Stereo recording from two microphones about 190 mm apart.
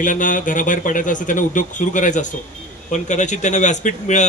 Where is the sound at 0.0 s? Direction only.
45° left (ahead or behind).